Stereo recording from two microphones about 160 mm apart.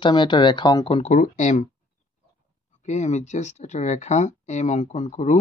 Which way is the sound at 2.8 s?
45° left (ahead or behind).